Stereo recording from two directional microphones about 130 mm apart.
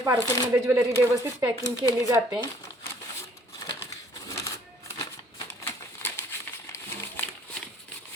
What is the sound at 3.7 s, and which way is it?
Crushing, 20° left (ahead or behind).